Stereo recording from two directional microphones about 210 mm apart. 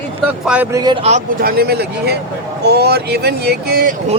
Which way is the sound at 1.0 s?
40° right (ahead or behind).